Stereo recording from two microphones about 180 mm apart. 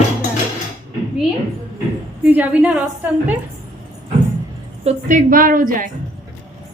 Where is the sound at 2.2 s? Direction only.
10° right (ahead or behind).